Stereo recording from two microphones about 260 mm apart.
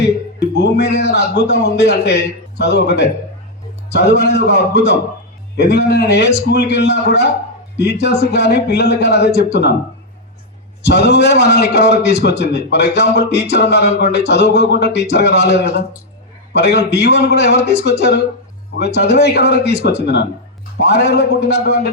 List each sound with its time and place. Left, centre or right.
0.0 s speech: left
10.8 s speech: left